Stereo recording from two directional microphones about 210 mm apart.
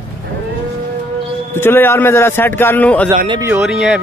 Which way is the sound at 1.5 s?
10° left (ahead or behind).